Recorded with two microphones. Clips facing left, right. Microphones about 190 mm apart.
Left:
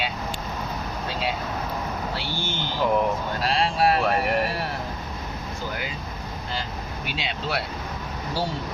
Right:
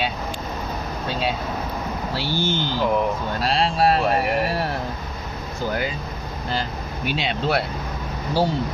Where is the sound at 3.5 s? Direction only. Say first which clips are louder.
Right 2 dB; 30° right (ahead or behind).